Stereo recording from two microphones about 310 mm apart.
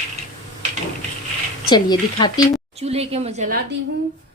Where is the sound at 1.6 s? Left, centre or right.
Centre.